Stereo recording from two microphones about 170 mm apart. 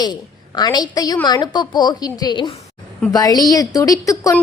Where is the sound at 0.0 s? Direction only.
25° left (ahead or behind).